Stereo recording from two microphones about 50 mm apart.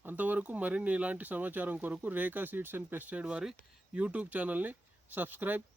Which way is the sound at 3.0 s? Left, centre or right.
Right.